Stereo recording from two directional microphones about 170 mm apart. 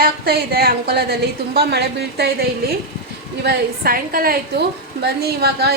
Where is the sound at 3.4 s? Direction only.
60° right (ahead or behind).